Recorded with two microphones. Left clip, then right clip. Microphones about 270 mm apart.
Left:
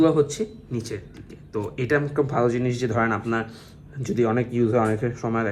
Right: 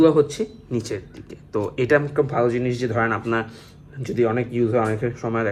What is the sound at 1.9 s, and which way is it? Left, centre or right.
Speech, centre.